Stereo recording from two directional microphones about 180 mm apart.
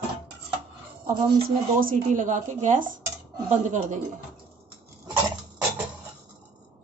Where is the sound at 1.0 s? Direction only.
50° right (ahead or behind).